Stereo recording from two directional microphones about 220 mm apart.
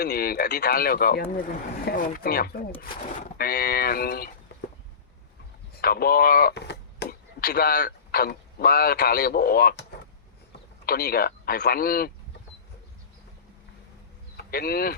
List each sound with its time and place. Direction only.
0.0 s speech: 45° left (ahead or behind)
5.8 s speech: 45° left (ahead or behind)
10.8 s speech: 45° left (ahead or behind)
14.5 s speech: 45° left (ahead or behind)